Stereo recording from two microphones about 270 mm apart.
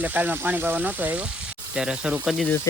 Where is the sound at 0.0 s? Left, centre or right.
Centre.